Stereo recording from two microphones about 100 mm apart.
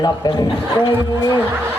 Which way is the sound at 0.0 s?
40° left (ahead or behind).